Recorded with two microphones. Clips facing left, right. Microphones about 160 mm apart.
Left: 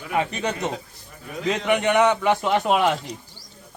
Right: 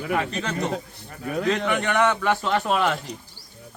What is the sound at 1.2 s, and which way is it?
Speech, 60° right (ahead or behind).